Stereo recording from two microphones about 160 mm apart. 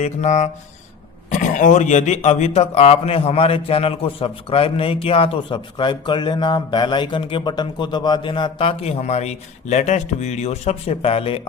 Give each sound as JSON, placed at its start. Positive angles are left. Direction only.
{"t": 0.0, "sound": "speech", "side_deg": 45}